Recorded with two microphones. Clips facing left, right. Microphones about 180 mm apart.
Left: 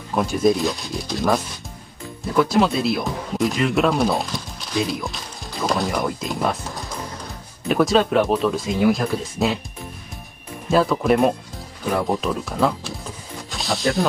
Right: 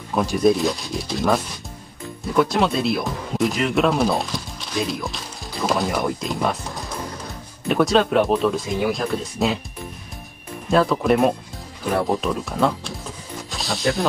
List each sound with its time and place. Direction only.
0.1 s speech: centre (ahead or behind)
10.7 s speech: centre (ahead or behind)